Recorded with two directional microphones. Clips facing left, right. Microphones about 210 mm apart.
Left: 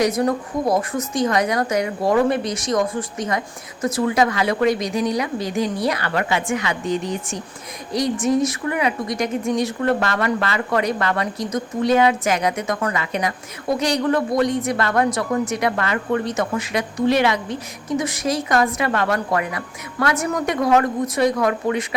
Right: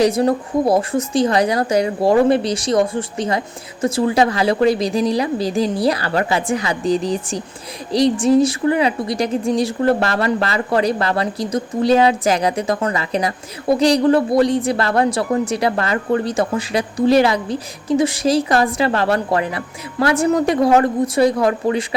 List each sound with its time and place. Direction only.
0.0 s speech: 30° right (ahead or behind)